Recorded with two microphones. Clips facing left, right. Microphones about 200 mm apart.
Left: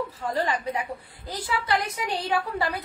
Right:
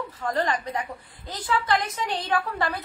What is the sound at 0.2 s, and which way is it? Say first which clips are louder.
A woman's voice: right 2 dB; 10° left (ahead or behind).